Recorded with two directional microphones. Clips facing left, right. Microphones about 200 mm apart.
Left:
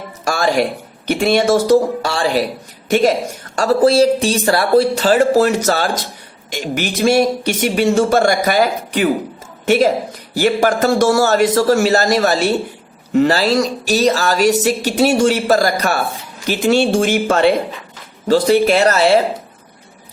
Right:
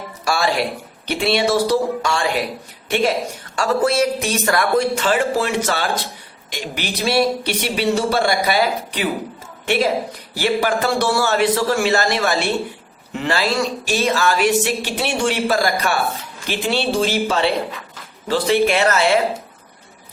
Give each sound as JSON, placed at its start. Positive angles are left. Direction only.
{"t": 0.3, "sound": "music", "side_deg": 45}
{"t": 1.0, "sound": "a woman's voice", "side_deg": 45}